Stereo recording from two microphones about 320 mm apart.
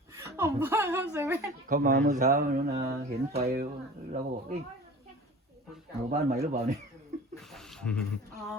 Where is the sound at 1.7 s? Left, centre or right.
Right.